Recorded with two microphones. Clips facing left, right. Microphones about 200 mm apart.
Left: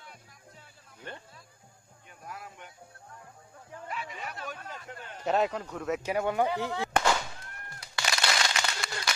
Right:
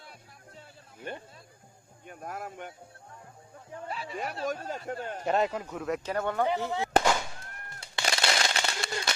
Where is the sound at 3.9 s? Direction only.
30° right (ahead or behind).